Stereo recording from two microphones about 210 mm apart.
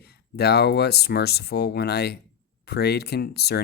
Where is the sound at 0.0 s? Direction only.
50° left (ahead or behind).